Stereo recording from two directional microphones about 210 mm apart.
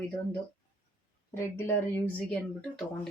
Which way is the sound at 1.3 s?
10° left (ahead or behind).